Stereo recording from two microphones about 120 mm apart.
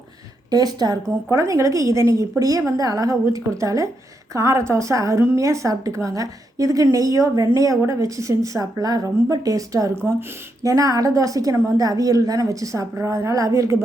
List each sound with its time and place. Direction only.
0.5 s a woman's voice: 35° right (ahead or behind)